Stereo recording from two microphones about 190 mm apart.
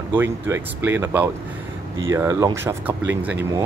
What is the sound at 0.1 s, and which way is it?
Speech, 10° right (ahead or behind).